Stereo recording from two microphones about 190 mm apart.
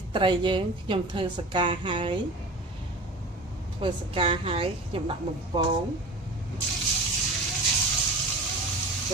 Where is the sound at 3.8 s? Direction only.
25° right (ahead or behind).